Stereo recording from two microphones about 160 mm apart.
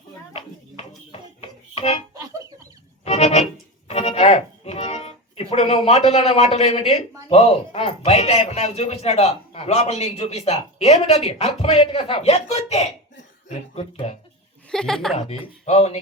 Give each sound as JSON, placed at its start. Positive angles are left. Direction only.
{"t": 1.4, "sound": "music", "side_deg": 40}
{"t": 3.0, "sound": "music", "side_deg": 40}
{"t": 3.8, "sound": "speech", "side_deg": 40}
{"t": 14.7, "sound": "a woman's voice", "side_deg": 5}
{"t": 15.6, "sound": "speech", "side_deg": 40}